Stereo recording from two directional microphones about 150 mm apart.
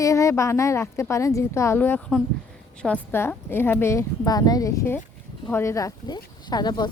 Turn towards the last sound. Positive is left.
turn(degrees=30)  # may be behind; listen again after turning